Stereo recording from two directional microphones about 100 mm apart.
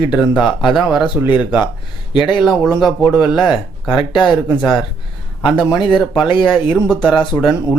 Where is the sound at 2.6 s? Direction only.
10° right (ahead or behind).